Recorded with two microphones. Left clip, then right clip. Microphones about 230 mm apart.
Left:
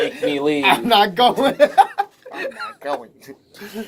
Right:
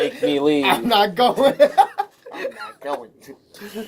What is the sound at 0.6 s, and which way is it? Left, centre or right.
Speech, centre.